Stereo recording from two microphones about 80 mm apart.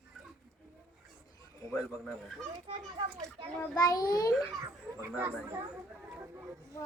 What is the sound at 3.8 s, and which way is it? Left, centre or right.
Speech, left.